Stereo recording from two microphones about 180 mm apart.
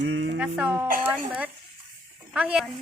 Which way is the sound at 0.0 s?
75° right (ahead or behind).